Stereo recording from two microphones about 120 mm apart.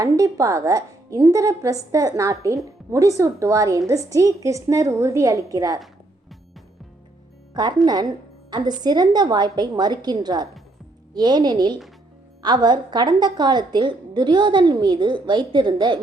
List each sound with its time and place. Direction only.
0.0 s a woman's voice: 30° right (ahead or behind)
7.6 s a woman's voice: 35° right (ahead or behind)